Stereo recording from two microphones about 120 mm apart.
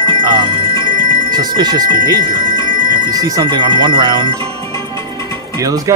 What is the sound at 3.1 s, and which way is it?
Speech, 30° right (ahead or behind).